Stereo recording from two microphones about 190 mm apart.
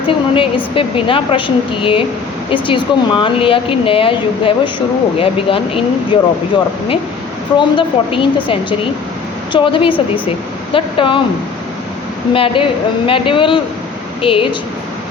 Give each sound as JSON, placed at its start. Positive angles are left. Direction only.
{"t": 0.1, "sound": "speech", "side_deg": 25}
{"t": 7.6, "sound": "speech", "side_deg": 25}
{"t": 12.3, "sound": "a woman's voice", "side_deg": 25}